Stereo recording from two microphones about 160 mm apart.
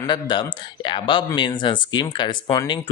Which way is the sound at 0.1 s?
30° left (ahead or behind).